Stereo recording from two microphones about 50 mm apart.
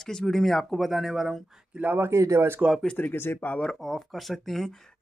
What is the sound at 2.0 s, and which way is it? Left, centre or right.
Speech, right.